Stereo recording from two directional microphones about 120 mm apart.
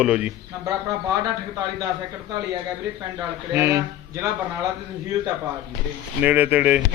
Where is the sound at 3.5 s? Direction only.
25° right (ahead or behind).